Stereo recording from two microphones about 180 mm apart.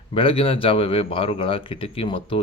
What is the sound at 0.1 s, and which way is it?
A man's voice, 30° left (ahead or behind).